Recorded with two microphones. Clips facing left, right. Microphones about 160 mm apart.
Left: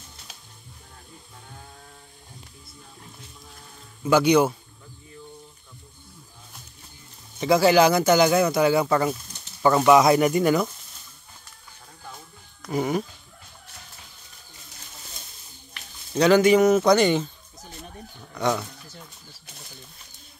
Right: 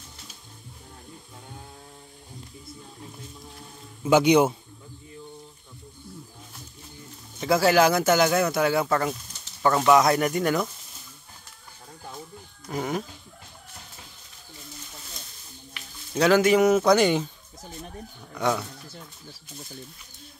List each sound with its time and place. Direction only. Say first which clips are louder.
4.0 s speech: even; 20° right (ahead or behind)
7.3 s speech: left 2 dB; centre (ahead or behind)
12.7 s speech: left 4 dB; 5° left (ahead or behind)
16.2 s speech: left 2 dB; 5° right (ahead or behind)
18.3 s speech: left 1 dB; 5° right (ahead or behind)